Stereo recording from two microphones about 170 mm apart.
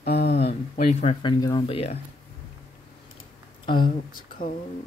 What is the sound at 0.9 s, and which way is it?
Speech, 35° left (ahead or behind).